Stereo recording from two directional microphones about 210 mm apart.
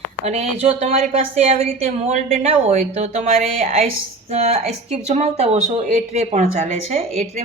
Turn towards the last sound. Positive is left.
turn(degrees=-30)  # may be behind; listen again after turning